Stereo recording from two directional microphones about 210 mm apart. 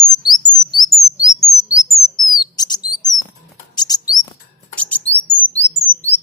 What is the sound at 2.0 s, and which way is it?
Bird, centre (ahead or behind).